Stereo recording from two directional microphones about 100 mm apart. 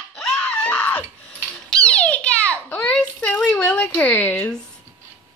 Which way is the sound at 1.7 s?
10° left (ahead or behind).